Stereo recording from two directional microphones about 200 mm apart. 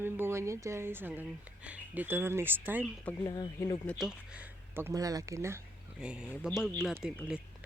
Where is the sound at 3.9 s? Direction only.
Centre (ahead or behind).